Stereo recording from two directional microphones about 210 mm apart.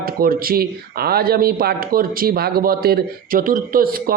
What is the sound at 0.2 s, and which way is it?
Speech, 45° right (ahead or behind).